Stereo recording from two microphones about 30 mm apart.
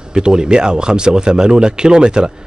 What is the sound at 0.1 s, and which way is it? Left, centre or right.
Speech, right.